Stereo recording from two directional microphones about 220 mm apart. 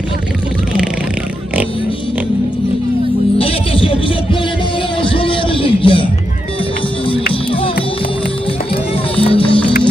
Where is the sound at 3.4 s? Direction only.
25° left (ahead or behind).